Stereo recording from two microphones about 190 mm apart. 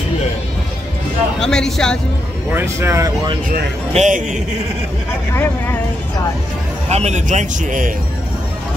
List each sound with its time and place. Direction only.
1.4 s speech: 5° left (ahead or behind)
2.5 s speech: 15° right (ahead or behind)
3.9 s speech: 40° right (ahead or behind)
5.3 s speech: 10° left (ahead or behind)
6.9 s speech: 35° right (ahead or behind)